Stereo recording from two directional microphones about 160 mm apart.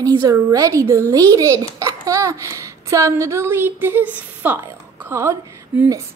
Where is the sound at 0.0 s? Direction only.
25° right (ahead or behind).